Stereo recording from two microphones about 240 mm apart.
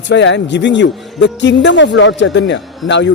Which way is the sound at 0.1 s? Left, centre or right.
Left.